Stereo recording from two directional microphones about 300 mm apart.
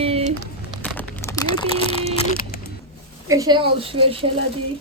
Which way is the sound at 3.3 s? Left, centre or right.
Centre.